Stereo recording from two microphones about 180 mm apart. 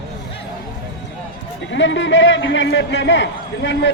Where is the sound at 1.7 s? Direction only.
90° left.